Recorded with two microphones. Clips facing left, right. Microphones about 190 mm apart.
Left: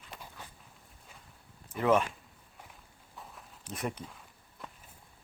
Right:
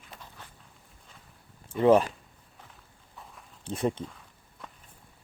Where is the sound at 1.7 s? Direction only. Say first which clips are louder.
Right 6 dB; 30° right (ahead or behind).